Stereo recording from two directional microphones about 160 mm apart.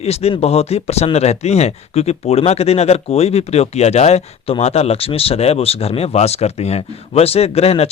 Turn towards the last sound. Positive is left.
turn(degrees=40)  # may be behind; listen again after turning